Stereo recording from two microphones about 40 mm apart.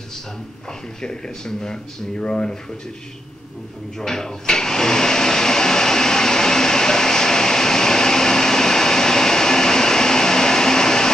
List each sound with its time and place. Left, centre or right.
1.0 s speech: centre
4.0 s blender: centre